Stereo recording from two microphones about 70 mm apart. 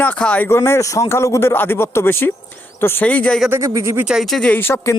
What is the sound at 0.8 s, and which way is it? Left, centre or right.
Speech, left.